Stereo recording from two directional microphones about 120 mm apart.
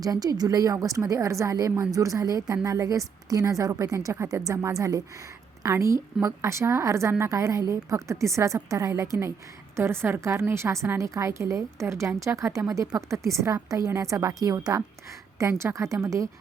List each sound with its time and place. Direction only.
0.0 s a woman's voice: 30° right (ahead or behind)